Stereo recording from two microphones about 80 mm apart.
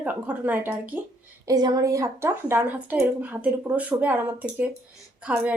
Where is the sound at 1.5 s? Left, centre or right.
Right.